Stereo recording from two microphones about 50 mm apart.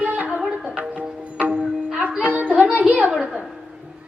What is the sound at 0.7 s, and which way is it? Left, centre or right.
Music, right.